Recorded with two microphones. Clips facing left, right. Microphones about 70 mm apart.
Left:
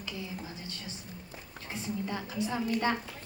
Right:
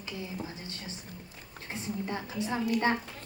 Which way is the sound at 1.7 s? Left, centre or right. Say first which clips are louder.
Even; right.